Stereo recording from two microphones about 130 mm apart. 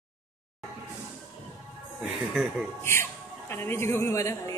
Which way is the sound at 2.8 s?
20° left (ahead or behind).